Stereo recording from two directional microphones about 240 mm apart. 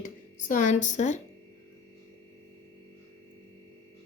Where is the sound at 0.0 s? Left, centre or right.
Left.